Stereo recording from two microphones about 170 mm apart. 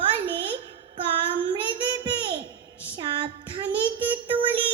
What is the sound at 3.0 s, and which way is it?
Child singing, 25° right (ahead or behind).